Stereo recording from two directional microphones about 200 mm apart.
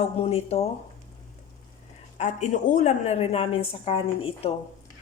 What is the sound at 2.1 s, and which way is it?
A woman's voice, 35° left (ahead or behind).